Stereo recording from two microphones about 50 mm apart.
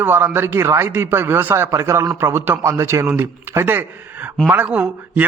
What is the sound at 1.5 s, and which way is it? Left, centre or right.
Speech, right.